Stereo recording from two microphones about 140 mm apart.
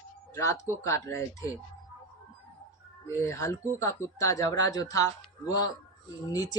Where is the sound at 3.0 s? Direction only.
20° left (ahead or behind).